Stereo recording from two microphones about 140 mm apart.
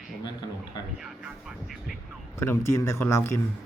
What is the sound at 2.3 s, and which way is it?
Speech, 20° left (ahead or behind).